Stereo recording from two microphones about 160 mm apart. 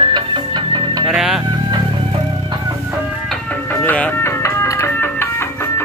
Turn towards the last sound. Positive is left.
turn(degrees=15)  # may be behind; listen again after turning